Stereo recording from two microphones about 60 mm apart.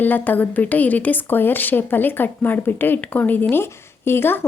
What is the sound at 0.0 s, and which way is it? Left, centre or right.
A woman's voice, left.